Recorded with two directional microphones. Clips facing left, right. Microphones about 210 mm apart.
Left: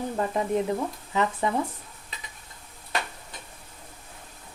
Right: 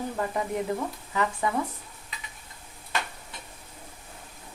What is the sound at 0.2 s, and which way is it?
Speech, 20° left (ahead or behind).